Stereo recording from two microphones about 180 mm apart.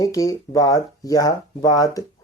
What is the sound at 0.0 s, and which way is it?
Speech, 20° left (ahead or behind).